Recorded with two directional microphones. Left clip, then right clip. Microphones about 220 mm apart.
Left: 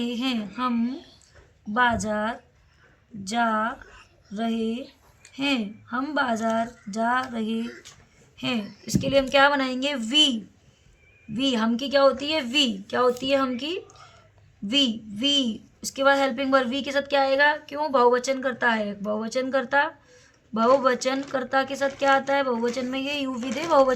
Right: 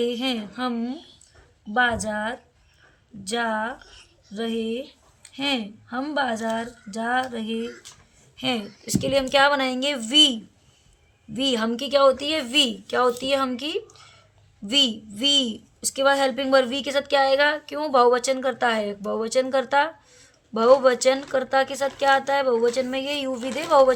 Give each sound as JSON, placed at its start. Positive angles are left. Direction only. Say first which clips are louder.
{"t": 0.0, "sound": "a woman's voice", "louder": "right 4 dB", "side_deg": -45}
{"t": 11.3, "sound": "a woman's voice", "louder": "right 1 dB", "side_deg": -45}